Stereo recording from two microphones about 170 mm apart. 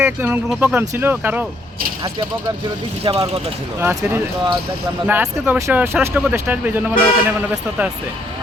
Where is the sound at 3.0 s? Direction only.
35° right (ahead or behind).